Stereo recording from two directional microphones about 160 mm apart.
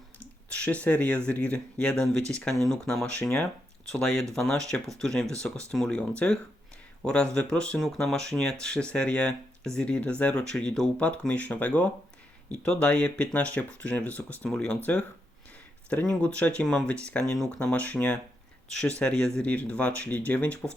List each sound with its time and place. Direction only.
0.2 s speech: 10° left (ahead or behind)
15.9 s speech: 10° left (ahead or behind)